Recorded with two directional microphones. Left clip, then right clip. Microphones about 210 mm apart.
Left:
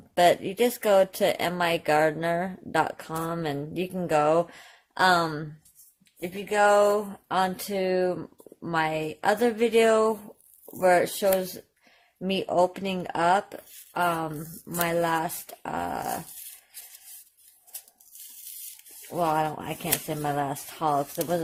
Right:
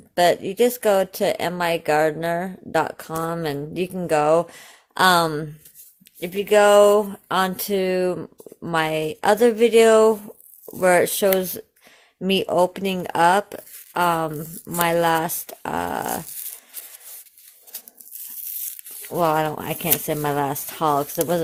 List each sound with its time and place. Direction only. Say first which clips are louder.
0.1 s speech: right 3 dB; 15° right (ahead or behind)
4.9 s speech: right 5 dB; 30° right (ahead or behind)
6.1 s speech: right 8 dB; 45° right (ahead or behind); by 16.0 s 30° right (ahead or behind)
19.0 s speech: right 5 dB; 30° right (ahead or behind)